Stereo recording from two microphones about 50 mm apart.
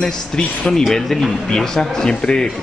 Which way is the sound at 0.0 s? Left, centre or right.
Centre.